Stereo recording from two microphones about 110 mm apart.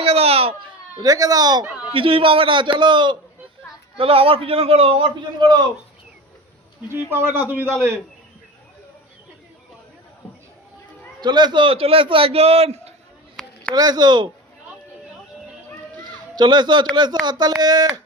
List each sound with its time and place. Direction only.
0.0 s a sound: 65° right (ahead or behind)
1.0 s speech: 35° right (ahead or behind)
1.9 s a man's voice: 55° right (ahead or behind)
3.9 s a man's voice: 55° right (ahead or behind)
7.1 s a man's voice: 20° right (ahead or behind)
11.2 s a man's voice: 40° right (ahead or behind); by 12.9 s 70° right (ahead or behind)
13.4 s a sound: centre (ahead or behind)
13.7 s speech: 40° right (ahead or behind)
16.0 s a sound: 40° right (ahead or behind)
16.9 s speech: 40° right (ahead or behind)